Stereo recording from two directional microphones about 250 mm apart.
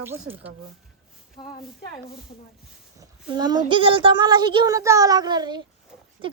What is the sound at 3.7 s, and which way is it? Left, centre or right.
Speech, right.